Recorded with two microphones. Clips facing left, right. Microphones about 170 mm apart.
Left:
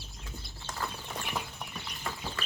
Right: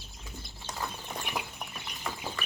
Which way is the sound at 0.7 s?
20° right (ahead or behind).